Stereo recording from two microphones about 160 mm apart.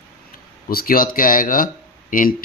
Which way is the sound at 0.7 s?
65° left (ahead or behind).